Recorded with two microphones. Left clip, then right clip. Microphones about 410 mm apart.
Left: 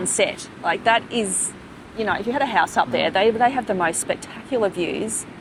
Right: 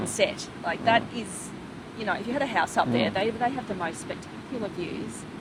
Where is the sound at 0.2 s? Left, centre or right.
Left.